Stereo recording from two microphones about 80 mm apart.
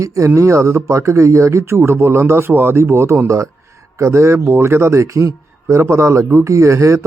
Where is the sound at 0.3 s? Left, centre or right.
Right.